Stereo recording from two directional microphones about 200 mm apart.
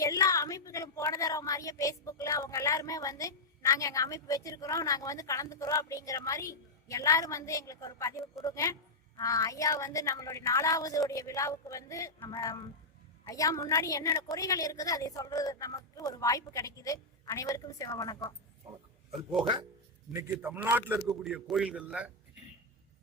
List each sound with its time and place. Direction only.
0.0 s speech: 15° left (ahead or behind)
20.1 s a man's voice: 10° right (ahead or behind)